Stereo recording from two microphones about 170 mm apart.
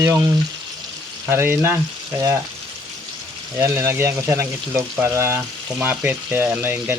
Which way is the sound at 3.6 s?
15° right (ahead or behind).